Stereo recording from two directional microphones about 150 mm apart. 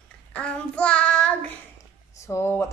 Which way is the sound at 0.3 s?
5° left (ahead or behind).